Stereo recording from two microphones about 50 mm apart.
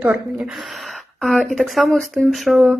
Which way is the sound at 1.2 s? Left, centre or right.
Centre.